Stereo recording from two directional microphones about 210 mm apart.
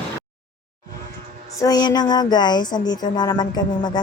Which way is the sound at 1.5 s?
20° left (ahead or behind).